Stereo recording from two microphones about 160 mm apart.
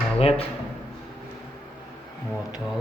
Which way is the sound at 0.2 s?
40° left (ahead or behind).